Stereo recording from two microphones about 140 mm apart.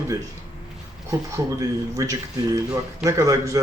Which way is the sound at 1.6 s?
25° right (ahead or behind).